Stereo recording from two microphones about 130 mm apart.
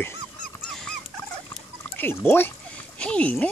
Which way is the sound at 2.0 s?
15° left (ahead or behind).